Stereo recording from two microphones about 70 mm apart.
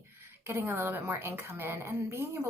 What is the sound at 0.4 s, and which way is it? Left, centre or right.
Speech, right.